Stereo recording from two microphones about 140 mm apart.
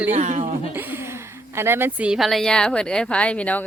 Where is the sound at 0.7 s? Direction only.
15° right (ahead or behind).